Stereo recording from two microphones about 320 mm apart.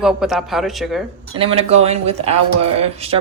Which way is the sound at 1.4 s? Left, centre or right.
Centre.